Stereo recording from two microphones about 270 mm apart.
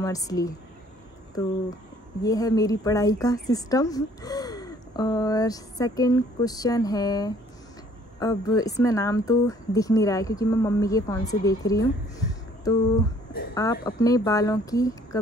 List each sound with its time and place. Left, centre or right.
0.0 s a woman's voice: centre
2.2 s a woman's voice: centre